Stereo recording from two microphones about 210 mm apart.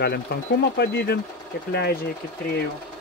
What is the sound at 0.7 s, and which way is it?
Speech, 50° left (ahead or behind).